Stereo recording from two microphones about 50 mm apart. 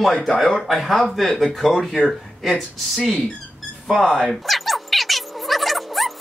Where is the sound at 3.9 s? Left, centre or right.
Centre.